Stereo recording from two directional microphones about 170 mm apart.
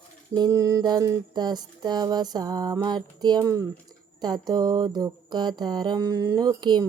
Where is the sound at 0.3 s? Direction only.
20° right (ahead or behind).